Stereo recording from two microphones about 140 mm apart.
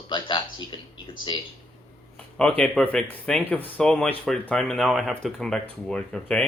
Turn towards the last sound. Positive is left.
turn(degrees=5)  # may be behind; listen again after turning